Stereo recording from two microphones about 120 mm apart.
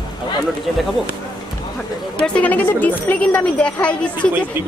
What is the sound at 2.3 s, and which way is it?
A woman's voice, 15° left (ahead or behind).